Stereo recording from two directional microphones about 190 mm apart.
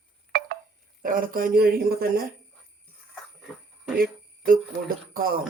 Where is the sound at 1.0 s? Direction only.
45° right (ahead or behind).